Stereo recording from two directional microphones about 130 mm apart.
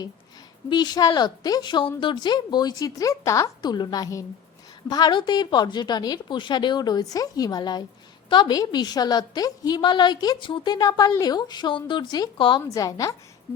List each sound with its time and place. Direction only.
0.7 s a woman's voice: 30° left (ahead or behind)
12.6 s a woman's voice: 25° left (ahead or behind)